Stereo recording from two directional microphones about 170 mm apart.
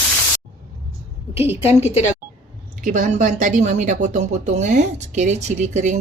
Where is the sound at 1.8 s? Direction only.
40° left (ahead or behind).